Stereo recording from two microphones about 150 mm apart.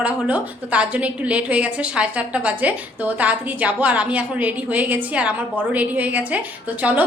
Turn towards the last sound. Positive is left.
turn(degrees=-10)  # may be behind; listen again after turning